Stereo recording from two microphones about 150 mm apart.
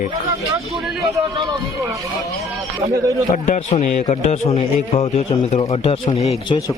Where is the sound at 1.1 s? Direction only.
20° right (ahead or behind).